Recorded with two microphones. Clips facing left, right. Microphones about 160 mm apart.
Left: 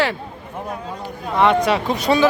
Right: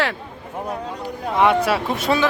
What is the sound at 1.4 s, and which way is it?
Speech, 10° right (ahead or behind).